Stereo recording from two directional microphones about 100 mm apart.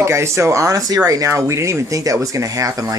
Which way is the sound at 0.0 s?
25° right (ahead or behind).